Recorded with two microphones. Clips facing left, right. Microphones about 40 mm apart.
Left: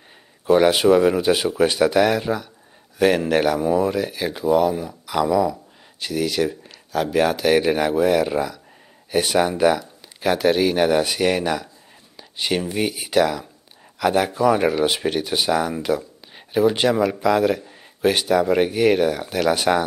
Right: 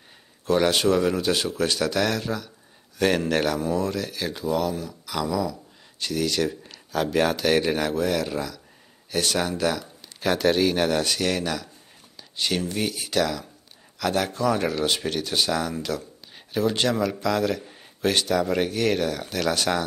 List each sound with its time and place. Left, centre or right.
0.5 s speech: centre